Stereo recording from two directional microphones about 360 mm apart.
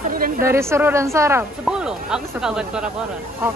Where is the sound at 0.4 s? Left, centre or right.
Centre.